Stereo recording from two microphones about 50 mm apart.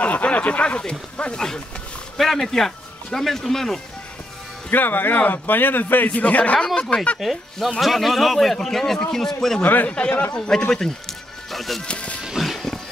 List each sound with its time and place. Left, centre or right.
0.0 s speech: left
2.1 s speech: centre
4.6 s speech: left; by 7.0 s centre
7.2 s a man's voice: centre
9.8 s a man's voice: left
10.3 s speech: centre
11.5 s speech: centre
11.8 s music: left
12.2 s music: centre